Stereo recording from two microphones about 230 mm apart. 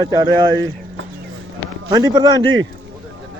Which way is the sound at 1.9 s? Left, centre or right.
Centre.